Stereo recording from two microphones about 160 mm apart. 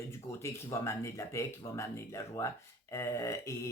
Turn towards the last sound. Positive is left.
turn(degrees=20)  # may be behind; listen again after turning